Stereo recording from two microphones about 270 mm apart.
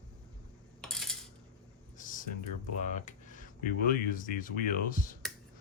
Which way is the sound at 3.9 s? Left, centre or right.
Left.